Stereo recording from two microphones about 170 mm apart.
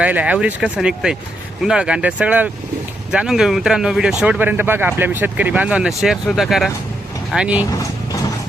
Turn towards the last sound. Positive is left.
turn(degrees=-5)  # may be behind; listen again after turning